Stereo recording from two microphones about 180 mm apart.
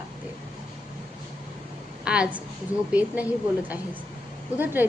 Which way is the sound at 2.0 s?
5° right (ahead or behind).